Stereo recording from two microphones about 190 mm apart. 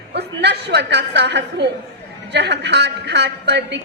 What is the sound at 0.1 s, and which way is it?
A woman's voice, 60° right (ahead or behind).